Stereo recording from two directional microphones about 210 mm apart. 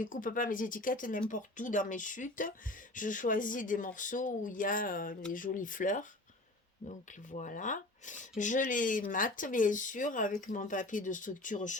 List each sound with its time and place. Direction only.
0.0 s speech: 40° left (ahead or behind)